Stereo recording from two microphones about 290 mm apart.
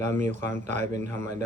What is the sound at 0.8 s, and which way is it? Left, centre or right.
Speech, right.